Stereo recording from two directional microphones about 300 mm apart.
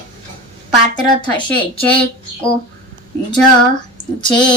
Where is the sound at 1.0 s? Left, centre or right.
Centre.